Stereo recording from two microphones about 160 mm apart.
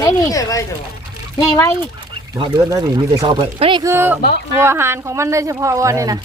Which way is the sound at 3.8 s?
15° right (ahead or behind).